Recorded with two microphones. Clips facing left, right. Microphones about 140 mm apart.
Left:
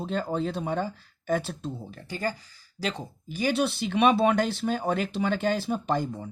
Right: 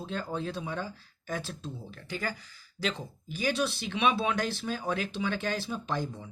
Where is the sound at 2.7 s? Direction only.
40° left (ahead or behind).